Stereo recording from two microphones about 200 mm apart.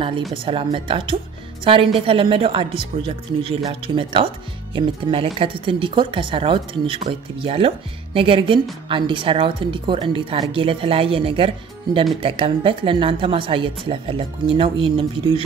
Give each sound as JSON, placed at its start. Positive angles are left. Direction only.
{"t": 0.5, "sound": "speech", "side_deg": -25}